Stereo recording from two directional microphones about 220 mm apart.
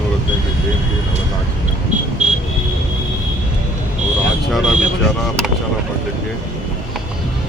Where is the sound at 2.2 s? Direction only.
30° right (ahead or behind).